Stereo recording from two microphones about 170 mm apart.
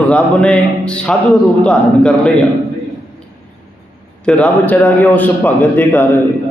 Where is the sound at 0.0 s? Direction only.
5° left (ahead or behind).